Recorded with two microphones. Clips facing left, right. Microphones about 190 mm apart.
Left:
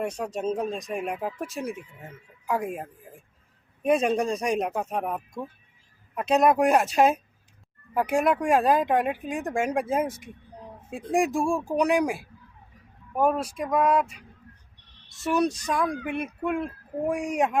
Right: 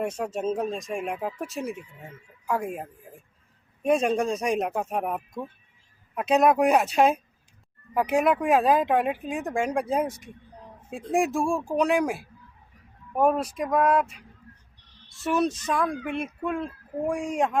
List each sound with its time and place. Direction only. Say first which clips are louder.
0.0 s speech: right 1 dB; 5° right (ahead or behind)
3.8 s speech: even; centre (ahead or behind)
15.2 s speech: even; centre (ahead or behind)